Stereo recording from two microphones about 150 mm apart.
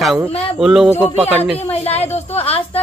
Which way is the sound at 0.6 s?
5° right (ahead or behind).